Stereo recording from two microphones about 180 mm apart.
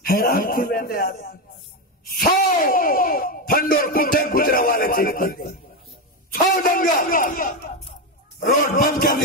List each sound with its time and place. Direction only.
0.0 s a man's voice: 55° left (ahead or behind)